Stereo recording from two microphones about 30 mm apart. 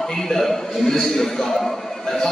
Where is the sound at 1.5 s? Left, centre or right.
Centre.